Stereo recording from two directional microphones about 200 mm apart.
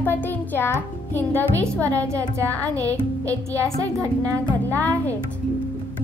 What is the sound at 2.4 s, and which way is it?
Speech, 10° left (ahead or behind).